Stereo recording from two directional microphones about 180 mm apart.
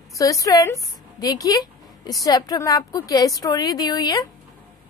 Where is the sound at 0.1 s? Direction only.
20° left (ahead or behind).